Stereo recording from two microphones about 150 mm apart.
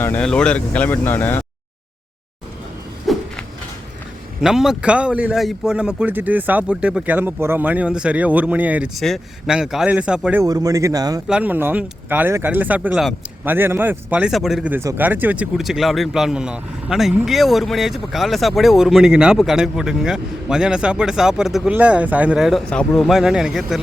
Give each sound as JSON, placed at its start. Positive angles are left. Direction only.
{"t": 0.0, "sound": "speech", "side_deg": 10}
{"t": 3.1, "sound": "a sound", "side_deg": 0}
{"t": 4.4, "sound": "a man's voice", "side_deg": -5}
{"t": 9.0, "sound": "speech", "side_deg": 0}
{"t": 10.4, "sound": "a man's voice", "side_deg": -25}
{"t": 11.3, "sound": "a man's voice", "side_deg": -10}